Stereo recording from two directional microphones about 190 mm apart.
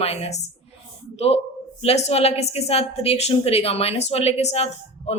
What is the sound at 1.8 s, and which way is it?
Speech, 35° left (ahead or behind).